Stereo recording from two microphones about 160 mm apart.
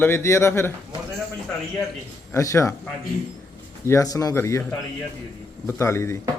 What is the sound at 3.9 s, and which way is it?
Speech, 20° left (ahead or behind).